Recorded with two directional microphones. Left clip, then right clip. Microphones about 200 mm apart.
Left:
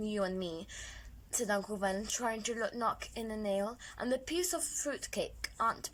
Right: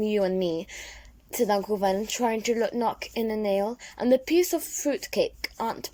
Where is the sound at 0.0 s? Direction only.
20° right (ahead or behind).